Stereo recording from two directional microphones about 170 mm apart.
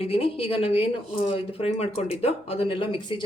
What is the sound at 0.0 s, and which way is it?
Speech, 35° left (ahead or behind).